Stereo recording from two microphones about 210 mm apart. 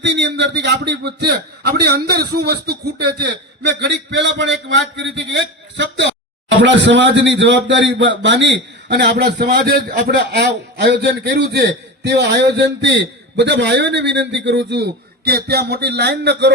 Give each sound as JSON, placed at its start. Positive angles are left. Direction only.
{"t": 0.0, "sound": "a man's voice", "side_deg": -55}